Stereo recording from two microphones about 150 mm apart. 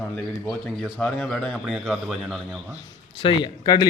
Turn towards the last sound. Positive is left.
turn(degrees=25)  # may be behind; listen again after turning